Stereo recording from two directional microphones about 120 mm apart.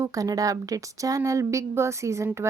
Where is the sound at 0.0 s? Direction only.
30° right (ahead or behind).